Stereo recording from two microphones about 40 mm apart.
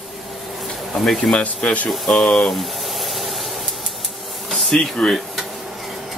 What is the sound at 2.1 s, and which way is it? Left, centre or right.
Speech, centre.